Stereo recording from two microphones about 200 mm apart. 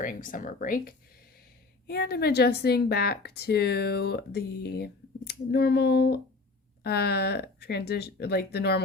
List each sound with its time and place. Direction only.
0.0 s a woman's voice: 40° left (ahead or behind)